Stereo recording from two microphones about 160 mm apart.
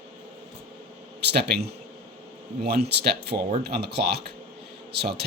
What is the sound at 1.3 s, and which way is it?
Speech, 90° right.